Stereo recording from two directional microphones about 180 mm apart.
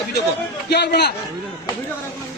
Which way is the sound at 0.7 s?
65° left (ahead or behind).